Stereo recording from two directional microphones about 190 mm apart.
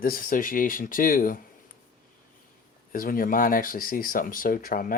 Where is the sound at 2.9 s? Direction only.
50° left (ahead or behind).